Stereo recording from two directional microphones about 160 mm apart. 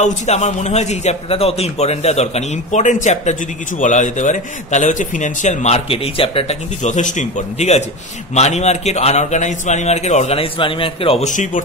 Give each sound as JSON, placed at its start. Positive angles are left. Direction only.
{"t": 0.0, "sound": "a man's voice", "side_deg": 45}
{"t": 11.2, "sound": "a man's voice", "side_deg": 50}